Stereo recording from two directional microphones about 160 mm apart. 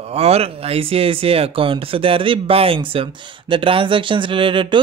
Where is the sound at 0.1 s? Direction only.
40° right (ahead or behind).